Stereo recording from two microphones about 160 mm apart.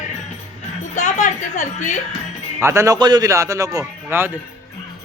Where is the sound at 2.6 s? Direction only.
20° right (ahead or behind).